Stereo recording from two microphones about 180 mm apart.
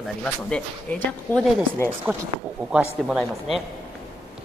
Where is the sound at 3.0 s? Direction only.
Centre (ahead or behind).